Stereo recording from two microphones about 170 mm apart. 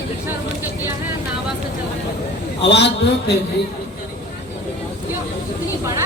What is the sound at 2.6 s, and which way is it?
Speech, 80° left.